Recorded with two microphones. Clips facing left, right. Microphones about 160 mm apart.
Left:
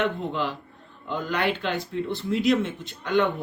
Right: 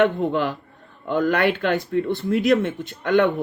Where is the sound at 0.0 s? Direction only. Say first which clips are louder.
Right 7 dB; 55° right (ahead or behind).